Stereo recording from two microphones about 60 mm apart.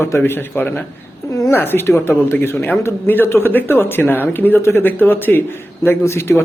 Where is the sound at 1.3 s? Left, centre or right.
Left.